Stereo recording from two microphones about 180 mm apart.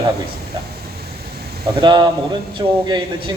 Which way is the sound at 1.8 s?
25° right (ahead or behind).